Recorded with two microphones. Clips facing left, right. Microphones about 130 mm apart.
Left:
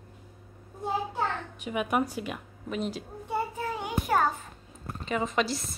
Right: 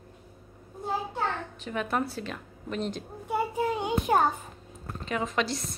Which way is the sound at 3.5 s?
20° right (ahead or behind).